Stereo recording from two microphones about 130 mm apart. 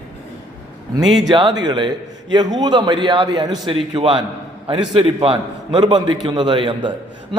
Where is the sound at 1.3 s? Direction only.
35° right (ahead or behind).